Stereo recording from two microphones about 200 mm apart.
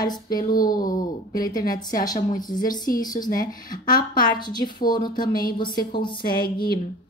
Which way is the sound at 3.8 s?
20° left (ahead or behind).